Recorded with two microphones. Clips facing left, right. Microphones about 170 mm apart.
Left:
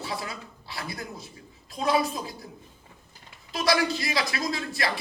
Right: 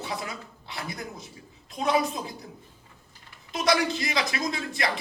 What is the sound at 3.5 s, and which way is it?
Speech, 20° right (ahead or behind).